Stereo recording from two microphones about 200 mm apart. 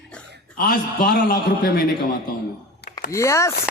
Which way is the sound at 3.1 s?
15° left (ahead or behind).